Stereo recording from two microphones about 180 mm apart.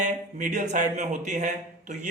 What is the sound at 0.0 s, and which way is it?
A man's voice, 45° right (ahead or behind).